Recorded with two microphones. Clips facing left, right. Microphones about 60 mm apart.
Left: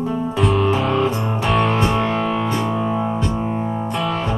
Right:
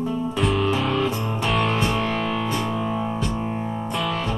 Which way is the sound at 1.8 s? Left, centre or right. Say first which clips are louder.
Left 4 dB; left.